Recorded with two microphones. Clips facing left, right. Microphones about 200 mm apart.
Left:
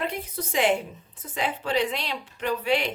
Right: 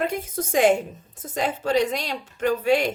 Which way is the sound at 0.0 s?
45° right (ahead or behind).